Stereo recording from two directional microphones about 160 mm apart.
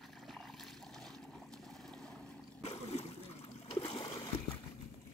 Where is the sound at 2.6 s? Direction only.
40° left (ahead or behind).